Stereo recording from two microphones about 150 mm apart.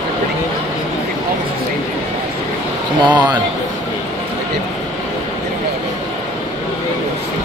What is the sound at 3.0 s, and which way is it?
Speech, 30° right (ahead or behind).